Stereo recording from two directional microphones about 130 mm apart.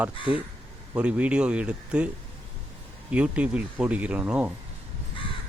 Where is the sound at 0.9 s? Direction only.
10° right (ahead or behind).